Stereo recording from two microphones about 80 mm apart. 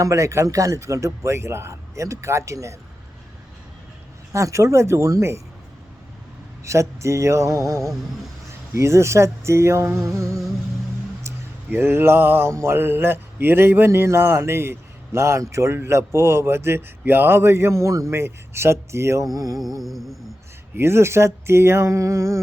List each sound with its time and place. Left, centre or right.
0.0 s speech: right
4.3 s speech: right
6.7 s speech: right
11.2 s a sound: right
12.5 s speech: right
19.8 s music: centre
20.7 s speech: right